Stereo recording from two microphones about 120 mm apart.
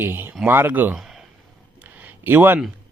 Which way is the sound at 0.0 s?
20° right (ahead or behind).